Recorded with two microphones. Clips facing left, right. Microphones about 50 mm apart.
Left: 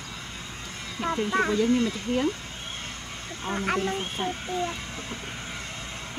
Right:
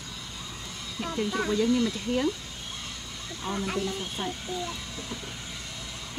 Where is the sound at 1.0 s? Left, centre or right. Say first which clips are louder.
Left 4 dB; left.